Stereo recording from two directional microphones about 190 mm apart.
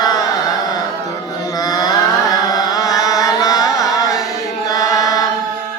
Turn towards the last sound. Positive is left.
turn(degrees=20)  # may be behind; listen again after turning